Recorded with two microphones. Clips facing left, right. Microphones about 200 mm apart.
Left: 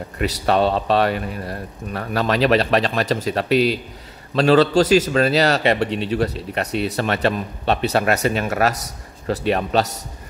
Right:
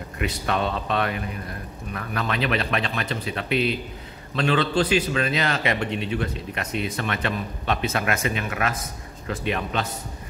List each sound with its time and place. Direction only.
0.2 s speech: 35° left (ahead or behind)